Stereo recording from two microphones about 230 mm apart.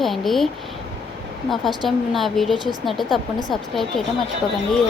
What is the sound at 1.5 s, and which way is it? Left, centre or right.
Speech, centre.